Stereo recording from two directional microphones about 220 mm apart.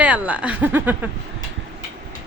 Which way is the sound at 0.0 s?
5° right (ahead or behind).